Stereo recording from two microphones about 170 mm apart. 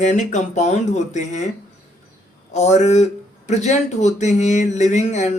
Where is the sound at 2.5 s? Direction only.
45° left (ahead or behind).